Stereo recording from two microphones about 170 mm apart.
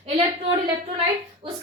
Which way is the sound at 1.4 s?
30° right (ahead or behind).